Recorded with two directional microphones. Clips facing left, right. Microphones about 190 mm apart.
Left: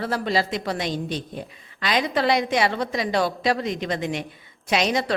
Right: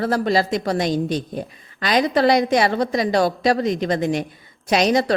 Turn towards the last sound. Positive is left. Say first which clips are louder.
# right 5 dB
turn(degrees=-40)  # may be behind; listen again after turning